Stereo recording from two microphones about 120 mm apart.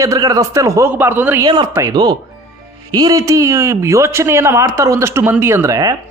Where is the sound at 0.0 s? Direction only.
30° right (ahead or behind).